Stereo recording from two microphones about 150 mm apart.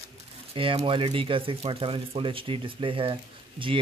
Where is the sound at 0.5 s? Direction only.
35° right (ahead or behind).